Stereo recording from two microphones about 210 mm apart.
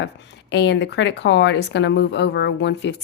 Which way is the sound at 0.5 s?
55° left (ahead or behind).